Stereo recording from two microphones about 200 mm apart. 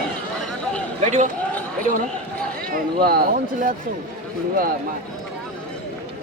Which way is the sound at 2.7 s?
50° right (ahead or behind).